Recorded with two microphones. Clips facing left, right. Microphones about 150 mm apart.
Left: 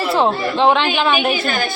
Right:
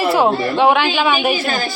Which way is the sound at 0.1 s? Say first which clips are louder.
Left 1 dB; 5° right (ahead or behind).